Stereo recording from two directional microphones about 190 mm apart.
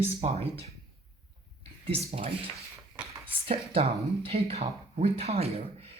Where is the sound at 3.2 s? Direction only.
30° right (ahead or behind).